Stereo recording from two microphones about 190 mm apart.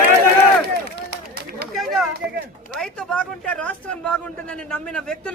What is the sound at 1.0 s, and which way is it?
Run, 55° right (ahead or behind).